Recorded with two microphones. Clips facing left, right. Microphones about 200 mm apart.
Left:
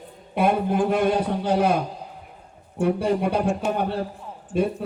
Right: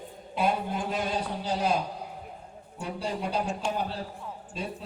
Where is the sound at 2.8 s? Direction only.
55° left (ahead or behind).